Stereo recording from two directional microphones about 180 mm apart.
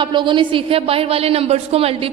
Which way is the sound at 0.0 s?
25° right (ahead or behind).